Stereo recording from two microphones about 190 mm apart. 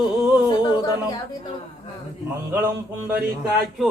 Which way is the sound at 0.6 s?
20° left (ahead or behind).